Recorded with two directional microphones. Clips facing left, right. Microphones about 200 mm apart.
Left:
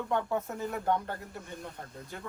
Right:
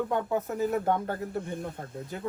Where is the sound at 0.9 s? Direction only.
50° right (ahead or behind).